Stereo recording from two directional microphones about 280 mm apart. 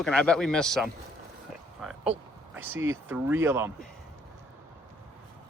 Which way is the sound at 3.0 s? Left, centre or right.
Centre.